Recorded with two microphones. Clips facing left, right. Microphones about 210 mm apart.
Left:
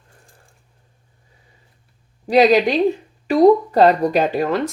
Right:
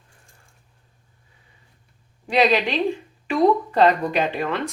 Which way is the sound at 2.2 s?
40° left (ahead or behind).